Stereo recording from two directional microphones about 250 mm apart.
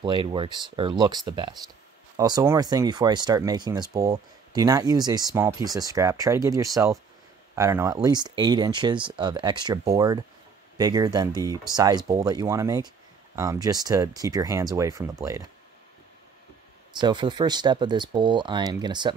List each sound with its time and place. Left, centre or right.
0.0 s speech: centre
17.0 s speech: centre